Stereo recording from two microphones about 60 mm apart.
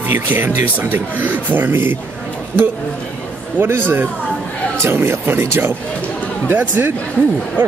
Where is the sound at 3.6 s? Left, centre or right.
Right.